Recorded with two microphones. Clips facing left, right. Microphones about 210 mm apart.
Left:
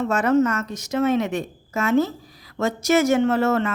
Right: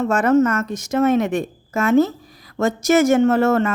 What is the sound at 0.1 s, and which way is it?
A woman's voice, 50° right (ahead or behind).